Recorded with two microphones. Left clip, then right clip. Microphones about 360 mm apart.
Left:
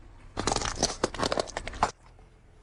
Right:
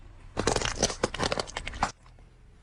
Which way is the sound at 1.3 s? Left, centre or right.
Right.